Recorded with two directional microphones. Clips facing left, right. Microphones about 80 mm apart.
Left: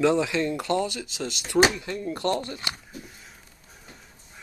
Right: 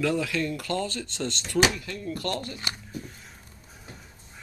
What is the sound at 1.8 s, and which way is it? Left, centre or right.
Speech, left.